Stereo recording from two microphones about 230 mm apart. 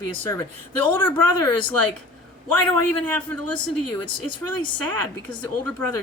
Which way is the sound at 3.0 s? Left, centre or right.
Centre.